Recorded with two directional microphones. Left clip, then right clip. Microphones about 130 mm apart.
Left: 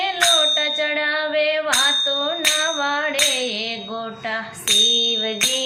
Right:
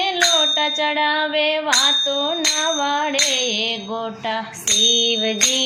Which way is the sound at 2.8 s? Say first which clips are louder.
Right 1 dB; 30° right (ahead or behind).